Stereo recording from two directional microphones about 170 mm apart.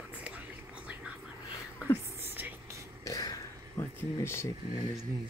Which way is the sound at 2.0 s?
15° right (ahead or behind).